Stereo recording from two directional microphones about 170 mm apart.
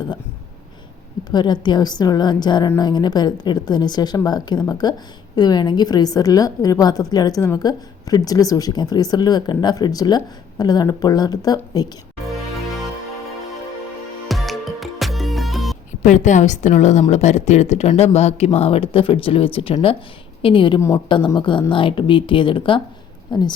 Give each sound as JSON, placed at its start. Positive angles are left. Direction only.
{"t": 1.3, "sound": "a woman's voice", "side_deg": 25}
{"t": 14.3, "sound": "music", "side_deg": 0}
{"t": 16.0, "sound": "a woman's voice", "side_deg": 45}